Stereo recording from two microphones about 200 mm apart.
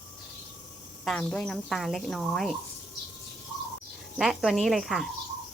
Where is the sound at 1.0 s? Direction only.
5° left (ahead or behind).